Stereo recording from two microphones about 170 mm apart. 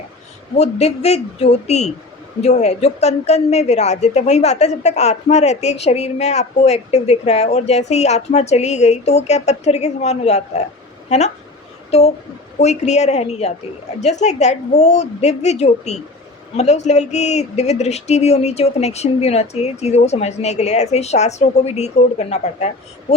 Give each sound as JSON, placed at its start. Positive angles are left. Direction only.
{"t": 0.5, "sound": "speech", "side_deg": 40}